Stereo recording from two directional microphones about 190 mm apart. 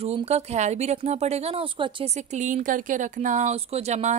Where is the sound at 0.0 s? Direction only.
30° right (ahead or behind).